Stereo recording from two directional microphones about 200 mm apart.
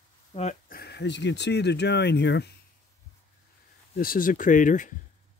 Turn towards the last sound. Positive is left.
turn(degrees=40)  # may be behind; listen again after turning